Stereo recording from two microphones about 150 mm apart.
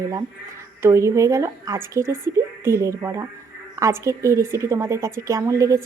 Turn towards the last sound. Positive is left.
turn(degrees=-20)  # may be behind; listen again after turning